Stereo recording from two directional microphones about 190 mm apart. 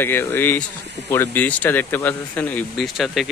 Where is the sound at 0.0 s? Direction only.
10° left (ahead or behind).